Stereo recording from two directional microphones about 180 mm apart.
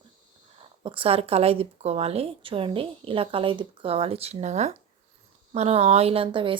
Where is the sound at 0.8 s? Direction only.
30° right (ahead or behind).